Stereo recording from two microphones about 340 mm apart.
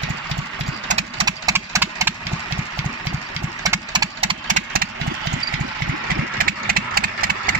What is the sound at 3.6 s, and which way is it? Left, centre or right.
Engine, centre.